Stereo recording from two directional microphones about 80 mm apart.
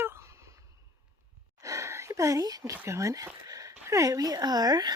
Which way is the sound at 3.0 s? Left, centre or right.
Right.